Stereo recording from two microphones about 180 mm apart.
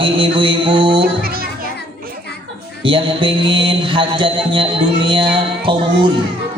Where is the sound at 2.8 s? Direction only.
30° right (ahead or behind).